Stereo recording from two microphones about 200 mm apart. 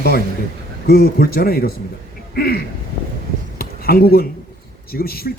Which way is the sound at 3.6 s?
50° left (ahead or behind).